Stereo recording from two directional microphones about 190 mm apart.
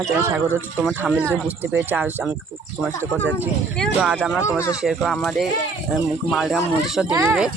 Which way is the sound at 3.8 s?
5° right (ahead or behind).